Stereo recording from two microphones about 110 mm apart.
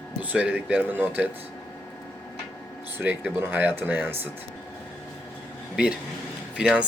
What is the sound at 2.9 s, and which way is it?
Speech, 15° right (ahead or behind).